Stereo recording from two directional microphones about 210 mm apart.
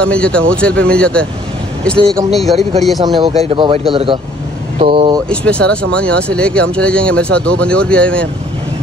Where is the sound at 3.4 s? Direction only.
25° right (ahead or behind).